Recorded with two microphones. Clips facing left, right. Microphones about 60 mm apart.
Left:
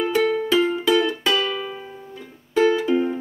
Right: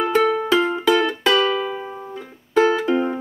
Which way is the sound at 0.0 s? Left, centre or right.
Right.